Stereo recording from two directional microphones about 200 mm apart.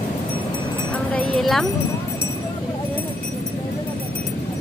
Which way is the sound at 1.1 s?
Centre (ahead or behind).